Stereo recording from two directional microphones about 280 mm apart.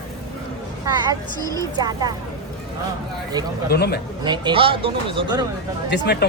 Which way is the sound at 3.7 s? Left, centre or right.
Left.